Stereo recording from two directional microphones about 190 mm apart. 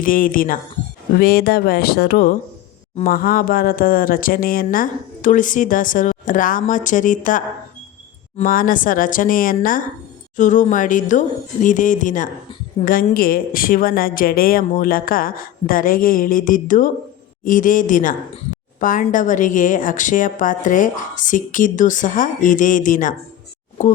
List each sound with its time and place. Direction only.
0.0 s speech: 45° left (ahead or behind)